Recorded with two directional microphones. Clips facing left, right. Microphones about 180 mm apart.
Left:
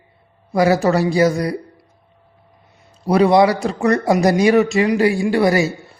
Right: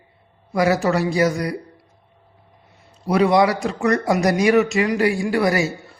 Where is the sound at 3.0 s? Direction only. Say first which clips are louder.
Left 3 dB; 35° left (ahead or behind).